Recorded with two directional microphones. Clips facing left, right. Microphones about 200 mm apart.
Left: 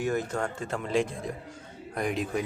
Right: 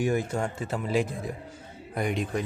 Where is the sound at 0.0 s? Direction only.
10° right (ahead or behind).